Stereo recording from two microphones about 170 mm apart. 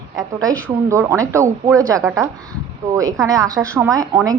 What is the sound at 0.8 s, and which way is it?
A woman's voice, 15° right (ahead or behind).